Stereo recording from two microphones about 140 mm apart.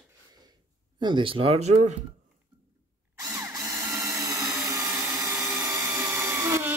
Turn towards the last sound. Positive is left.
turn(degrees=-20)  # may be behind; listen again after turning